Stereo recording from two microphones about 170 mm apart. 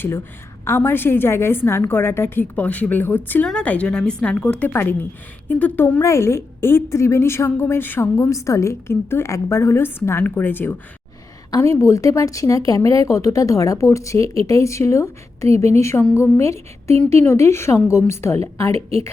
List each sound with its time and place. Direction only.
0.6 s a woman's voice: 15° left (ahead or behind)
18.7 s a woman's voice: 35° right (ahead or behind)